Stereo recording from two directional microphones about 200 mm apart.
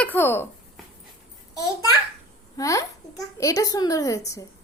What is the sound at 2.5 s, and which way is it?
A woman's voice, 15° left (ahead or behind).